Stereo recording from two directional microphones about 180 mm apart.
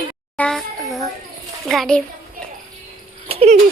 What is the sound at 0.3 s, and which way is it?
Speech, 5° left (ahead or behind).